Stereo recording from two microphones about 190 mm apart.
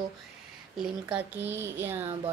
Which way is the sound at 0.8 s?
10° right (ahead or behind).